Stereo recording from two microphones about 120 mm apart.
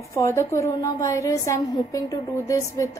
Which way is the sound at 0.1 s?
25° left (ahead or behind).